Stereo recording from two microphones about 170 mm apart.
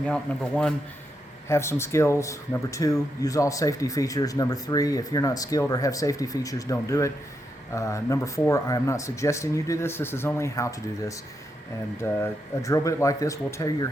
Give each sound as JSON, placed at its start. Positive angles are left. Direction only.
{"t": 0.0, "sound": "speech", "side_deg": 5}
{"t": 1.5, "sound": "speech", "side_deg": 15}
{"t": 12.2, "sound": "speech", "side_deg": 20}